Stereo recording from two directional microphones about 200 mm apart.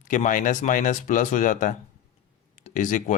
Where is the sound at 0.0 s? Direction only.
40° left (ahead or behind).